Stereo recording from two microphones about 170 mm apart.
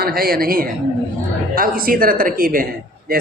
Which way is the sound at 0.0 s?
60° right (ahead or behind).